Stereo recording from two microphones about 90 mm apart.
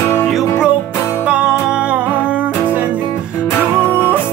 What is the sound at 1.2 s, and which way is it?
Music, 10° right (ahead or behind).